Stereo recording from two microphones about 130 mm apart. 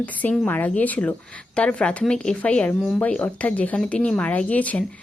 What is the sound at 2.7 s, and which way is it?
Speech, centre (ahead or behind).